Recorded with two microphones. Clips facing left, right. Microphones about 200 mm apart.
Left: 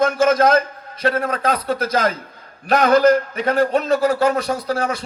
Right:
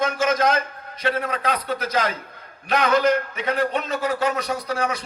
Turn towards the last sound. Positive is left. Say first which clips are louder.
# left 4 dB
turn(degrees=40)  # may be behind; listen again after turning